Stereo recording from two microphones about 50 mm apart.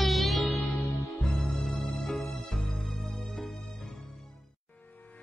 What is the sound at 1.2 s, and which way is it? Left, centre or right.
Music, centre.